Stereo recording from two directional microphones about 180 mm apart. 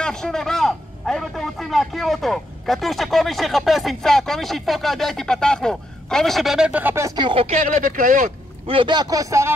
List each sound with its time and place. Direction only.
0.0 s a man's voice: 5° left (ahead or behind); by 8.3 s 50° right (ahead or behind)
8.6 s speech: 25° right (ahead or behind)